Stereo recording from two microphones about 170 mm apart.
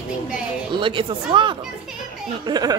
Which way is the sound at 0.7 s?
30° right (ahead or behind).